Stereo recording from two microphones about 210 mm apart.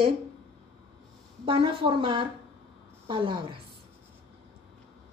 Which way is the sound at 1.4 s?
25° right (ahead or behind).